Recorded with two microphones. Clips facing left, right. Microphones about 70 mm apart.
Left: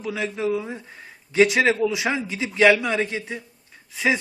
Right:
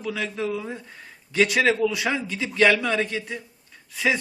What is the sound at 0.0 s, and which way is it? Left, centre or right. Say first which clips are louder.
A man's voice: left 2 dB; left.